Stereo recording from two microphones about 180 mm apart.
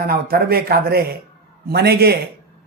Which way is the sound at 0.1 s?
55° right (ahead or behind).